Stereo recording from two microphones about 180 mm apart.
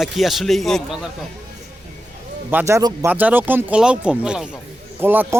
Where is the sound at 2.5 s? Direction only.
15° right (ahead or behind).